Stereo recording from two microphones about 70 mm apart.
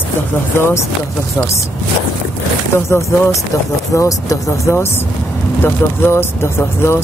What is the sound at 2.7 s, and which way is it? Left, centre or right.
Speech, left.